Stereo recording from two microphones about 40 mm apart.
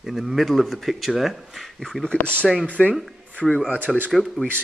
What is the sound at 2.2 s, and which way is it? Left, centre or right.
Speech, left.